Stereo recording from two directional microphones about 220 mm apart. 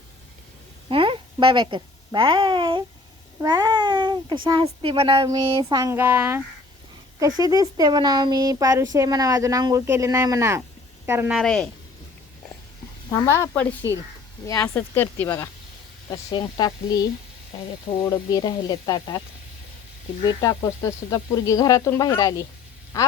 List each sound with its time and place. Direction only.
0.9 s a sound: 25° right (ahead or behind)
3.4 s babbling: 20° right (ahead or behind)
4.4 s a sound: 20° right (ahead or behind)
7.2 s speech: 15° right (ahead or behind); by 11.7 s centre (ahead or behind)
13.1 s speech: 10° left (ahead or behind)
20.2 s speech: 15° left (ahead or behind)